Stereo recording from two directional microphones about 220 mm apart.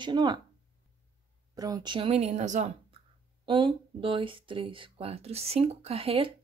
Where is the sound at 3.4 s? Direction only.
20° right (ahead or behind).